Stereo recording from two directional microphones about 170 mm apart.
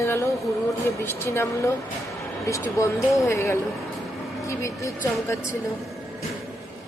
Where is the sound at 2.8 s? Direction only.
15° left (ahead or behind).